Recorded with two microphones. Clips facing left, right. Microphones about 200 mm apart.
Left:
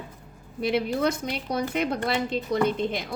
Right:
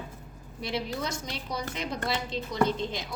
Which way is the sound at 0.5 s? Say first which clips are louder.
Left 8 dB; 60° left (ahead or behind).